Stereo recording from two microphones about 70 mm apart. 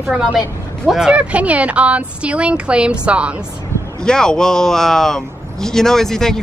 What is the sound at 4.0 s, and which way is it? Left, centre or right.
Speech, centre.